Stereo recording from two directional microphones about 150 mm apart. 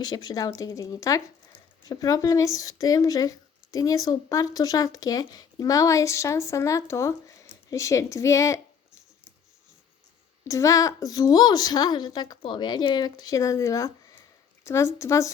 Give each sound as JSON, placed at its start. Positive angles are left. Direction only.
{"t": 0.0, "sound": "a woman's voice", "side_deg": 25}
{"t": 10.5, "sound": "a woman's voice", "side_deg": 20}